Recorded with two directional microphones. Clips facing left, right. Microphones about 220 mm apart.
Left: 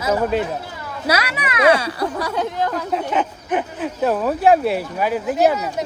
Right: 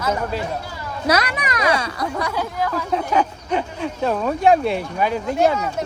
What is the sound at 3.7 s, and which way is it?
Speech, 5° left (ahead or behind).